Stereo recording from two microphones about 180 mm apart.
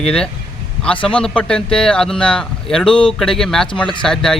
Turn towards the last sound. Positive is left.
turn(degrees=5)  # may be behind; listen again after turning